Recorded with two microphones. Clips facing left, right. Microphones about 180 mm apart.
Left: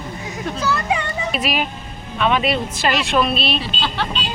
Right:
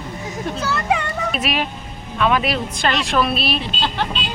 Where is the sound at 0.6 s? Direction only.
60° right (ahead or behind).